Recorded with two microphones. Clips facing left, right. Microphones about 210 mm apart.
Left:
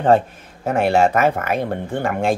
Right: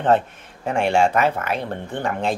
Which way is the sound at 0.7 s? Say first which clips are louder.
Left 2 dB; 40° left (ahead or behind).